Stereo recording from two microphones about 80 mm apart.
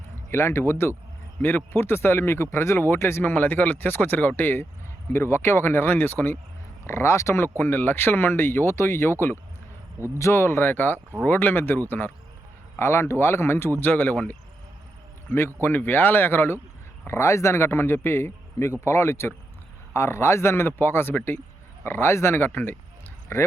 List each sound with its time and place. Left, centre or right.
0.3 s a man's voice: left
7.4 s speech: left
10.2 s speech: left
12.8 s a man's voice: left
15.6 s a man's voice: left
23.3 s a man's voice: left